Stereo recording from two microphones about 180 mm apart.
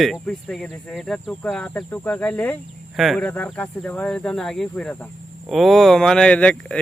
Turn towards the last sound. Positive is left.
turn(degrees=5)  # may be behind; listen again after turning